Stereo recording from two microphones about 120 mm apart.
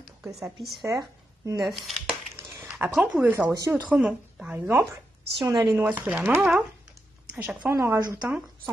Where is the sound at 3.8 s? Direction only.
10° right (ahead or behind).